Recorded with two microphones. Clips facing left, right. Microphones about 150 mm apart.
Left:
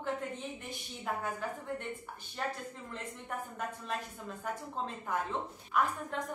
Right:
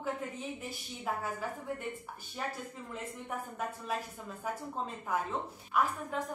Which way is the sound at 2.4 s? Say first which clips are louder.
Left 2 dB; 5° right (ahead or behind).